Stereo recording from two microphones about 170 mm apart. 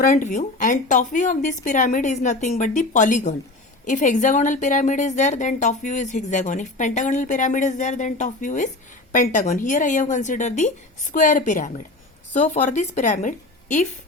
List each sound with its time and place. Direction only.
0.0 s a woman's voice: 50° left (ahead or behind)